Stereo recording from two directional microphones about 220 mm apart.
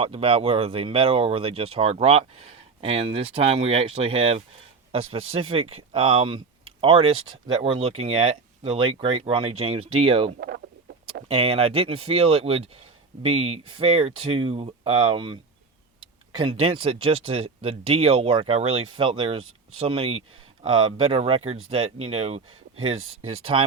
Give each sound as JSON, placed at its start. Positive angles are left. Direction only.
{"t": 0.0, "sound": "speech", "side_deg": -25}